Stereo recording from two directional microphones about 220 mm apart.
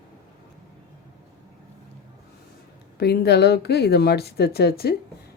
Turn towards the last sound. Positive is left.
turn(degrees=45)  # may be behind; listen again after turning